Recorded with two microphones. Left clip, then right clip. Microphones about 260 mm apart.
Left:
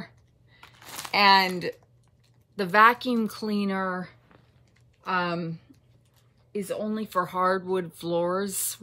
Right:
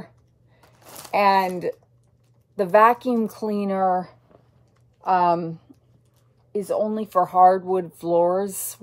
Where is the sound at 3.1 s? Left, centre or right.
Left.